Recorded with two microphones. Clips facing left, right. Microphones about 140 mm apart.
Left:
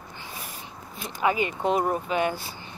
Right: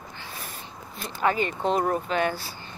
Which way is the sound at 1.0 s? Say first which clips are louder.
Even; 10° left (ahead or behind).